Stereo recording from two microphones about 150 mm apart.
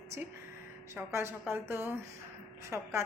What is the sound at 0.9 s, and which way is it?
A woman's voice, 15° right (ahead or behind).